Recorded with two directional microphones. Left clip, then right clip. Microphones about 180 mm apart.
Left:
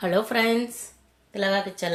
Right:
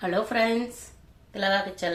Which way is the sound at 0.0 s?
60° left (ahead or behind).